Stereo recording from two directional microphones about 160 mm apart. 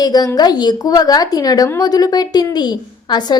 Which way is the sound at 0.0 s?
25° left (ahead or behind).